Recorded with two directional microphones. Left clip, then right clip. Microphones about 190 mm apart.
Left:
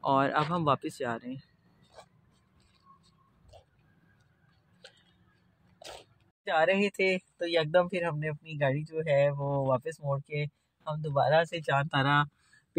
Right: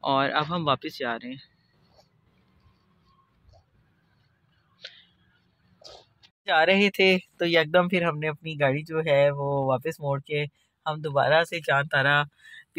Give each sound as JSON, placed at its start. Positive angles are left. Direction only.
{"t": 0.0, "sound": "speech", "side_deg": 5}
{"t": 6.4, "sound": "speech", "side_deg": -10}
{"t": 8.2, "sound": "speech", "side_deg": -30}
{"t": 11.6, "sound": "speech", "side_deg": -5}